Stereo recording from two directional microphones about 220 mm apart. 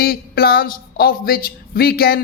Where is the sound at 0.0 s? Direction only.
45° left (ahead or behind).